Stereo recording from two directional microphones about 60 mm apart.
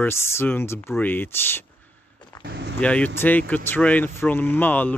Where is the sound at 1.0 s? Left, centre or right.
Left.